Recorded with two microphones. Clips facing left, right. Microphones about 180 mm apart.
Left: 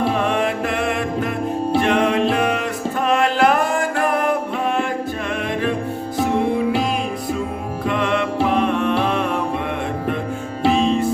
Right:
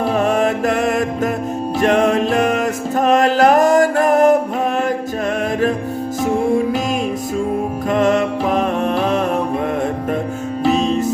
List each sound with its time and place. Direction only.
0.2 s music: 45° right (ahead or behind)
7.9 s music: 40° right (ahead or behind)